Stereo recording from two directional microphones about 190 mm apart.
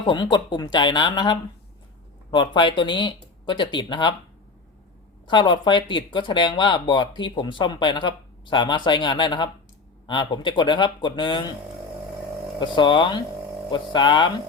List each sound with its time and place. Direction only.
0.0 s speech: 25° left (ahead or behind)
5.2 s speech: 25° left (ahead or behind)
12.5 s speech: 25° left (ahead or behind)